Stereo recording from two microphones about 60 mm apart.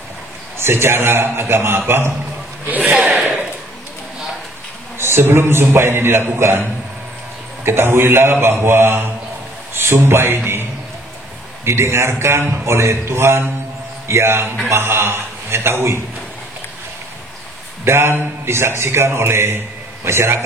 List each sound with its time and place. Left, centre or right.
0.6 s a man's voice: right
2.6 s a man's voice: right
2.9 s a sound: centre
4.9 s a man's voice: right
7.6 s a man's voice: right
17.8 s a man's voice: right